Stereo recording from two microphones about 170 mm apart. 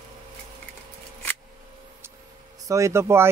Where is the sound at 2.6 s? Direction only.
20° right (ahead or behind).